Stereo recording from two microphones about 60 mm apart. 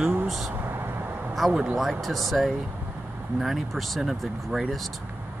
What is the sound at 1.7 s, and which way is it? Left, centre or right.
Speech, centre.